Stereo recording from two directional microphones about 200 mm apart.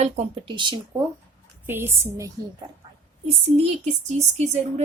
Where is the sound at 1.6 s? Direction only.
10° right (ahead or behind).